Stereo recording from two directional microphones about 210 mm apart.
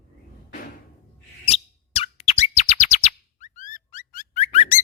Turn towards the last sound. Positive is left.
turn(degrees=30)  # may be behind; listen again after turning